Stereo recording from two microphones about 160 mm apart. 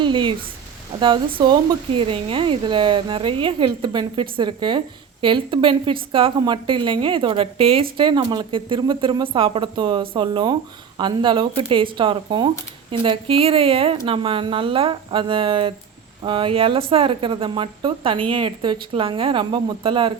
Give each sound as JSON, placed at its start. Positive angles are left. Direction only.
{"t": 0.0, "sound": "speech", "side_deg": -30}